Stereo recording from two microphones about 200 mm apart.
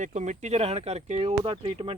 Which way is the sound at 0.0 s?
35° right (ahead or behind).